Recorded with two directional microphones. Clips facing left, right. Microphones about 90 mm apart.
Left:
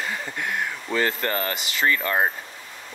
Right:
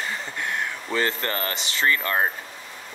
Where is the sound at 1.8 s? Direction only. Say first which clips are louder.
Left 1 dB; 15° left (ahead or behind).